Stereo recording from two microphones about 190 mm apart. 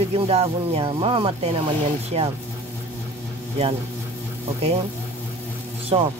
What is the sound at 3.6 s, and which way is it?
Speech, 30° right (ahead or behind).